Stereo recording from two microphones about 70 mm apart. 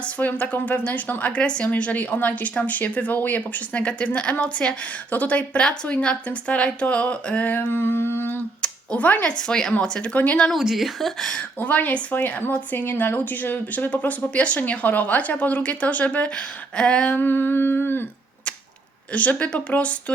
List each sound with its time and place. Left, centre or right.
0.0 s a woman's voice: left
8.6 s a sound: centre
9.4 s a woman's voice: centre
10.6 s speech: centre
11.3 s a woman's voice: left
17.2 s humming: left
19.1 s a woman's voice: left